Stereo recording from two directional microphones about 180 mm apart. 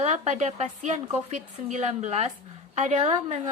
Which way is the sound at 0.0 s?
40° right (ahead or behind).